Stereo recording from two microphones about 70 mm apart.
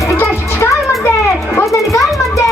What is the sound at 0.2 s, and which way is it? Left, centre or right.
Music, left.